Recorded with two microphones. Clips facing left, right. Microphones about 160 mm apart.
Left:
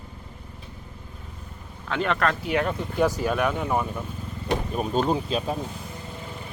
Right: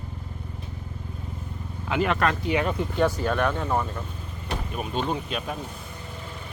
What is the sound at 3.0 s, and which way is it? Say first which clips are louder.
Speech: left 1 dB; 10° left (ahead or behind).